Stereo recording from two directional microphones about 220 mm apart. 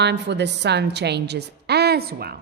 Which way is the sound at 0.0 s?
50° right (ahead or behind).